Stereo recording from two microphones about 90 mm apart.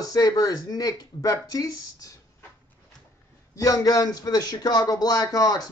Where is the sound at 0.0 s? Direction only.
45° left (ahead or behind).